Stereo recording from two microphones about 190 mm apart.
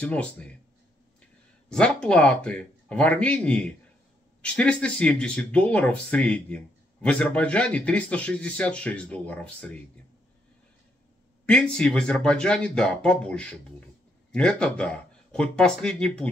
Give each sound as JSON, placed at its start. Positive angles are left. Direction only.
{"t": 0.0, "sound": "speech", "side_deg": 5}
{"t": 1.7, "sound": "speech", "side_deg": 5}
{"t": 11.4, "sound": "speech", "side_deg": 5}